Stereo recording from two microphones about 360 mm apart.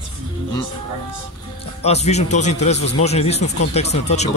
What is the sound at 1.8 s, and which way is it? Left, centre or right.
A man's voice, centre.